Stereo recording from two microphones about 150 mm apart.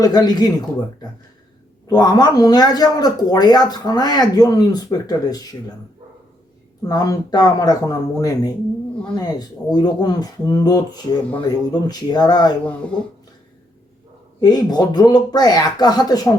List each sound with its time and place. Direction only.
0.0 s speech: 25° left (ahead or behind)
1.9 s speech: 25° left (ahead or behind)
6.8 s speech: 25° left (ahead or behind)
14.4 s speech: 25° left (ahead or behind)